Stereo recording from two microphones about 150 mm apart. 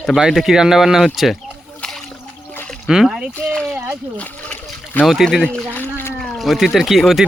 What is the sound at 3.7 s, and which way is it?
Speech, 15° right (ahead or behind).